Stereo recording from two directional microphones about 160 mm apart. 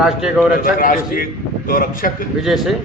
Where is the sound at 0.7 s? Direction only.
60° left (ahead or behind).